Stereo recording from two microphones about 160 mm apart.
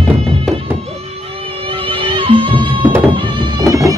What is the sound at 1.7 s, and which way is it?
Music, 35° right (ahead or behind).